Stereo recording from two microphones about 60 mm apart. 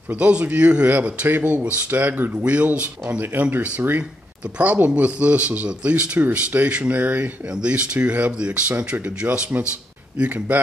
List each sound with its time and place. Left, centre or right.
0.2 s speech: right
2.4 s speech: right